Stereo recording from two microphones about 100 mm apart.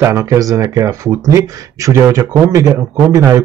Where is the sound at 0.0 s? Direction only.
25° right (ahead or behind).